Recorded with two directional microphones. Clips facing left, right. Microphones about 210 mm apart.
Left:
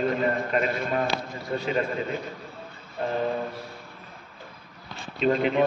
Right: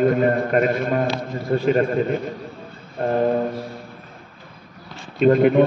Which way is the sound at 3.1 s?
50° right (ahead or behind).